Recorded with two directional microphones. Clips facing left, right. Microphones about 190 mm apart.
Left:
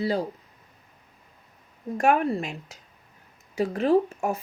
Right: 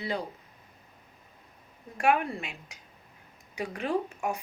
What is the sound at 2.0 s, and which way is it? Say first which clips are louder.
Speech: left 4 dB; 40° left (ahead or behind).